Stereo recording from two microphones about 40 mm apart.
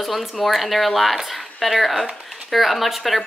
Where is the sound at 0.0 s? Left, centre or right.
Centre.